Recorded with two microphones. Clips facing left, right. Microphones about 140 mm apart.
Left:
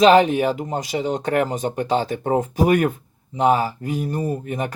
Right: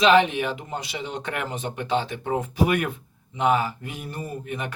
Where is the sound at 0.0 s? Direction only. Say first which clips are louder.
Left 5 dB; 40° left (ahead or behind).